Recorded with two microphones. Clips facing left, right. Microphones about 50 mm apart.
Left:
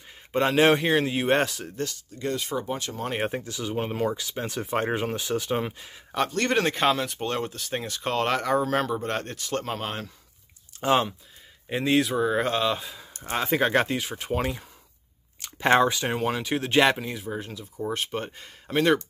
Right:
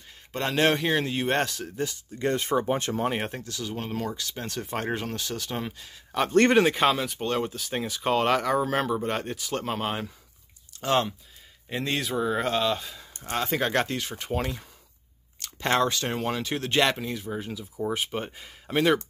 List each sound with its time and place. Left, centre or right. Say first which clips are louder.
0.3 s speech: left 4 dB; centre
1.9 s speech: right 3 dB; right
3.1 s speech: left 1 dB; centre
6.5 s speech: right 2 dB; centre
10.8 s speech: left 2 dB; centre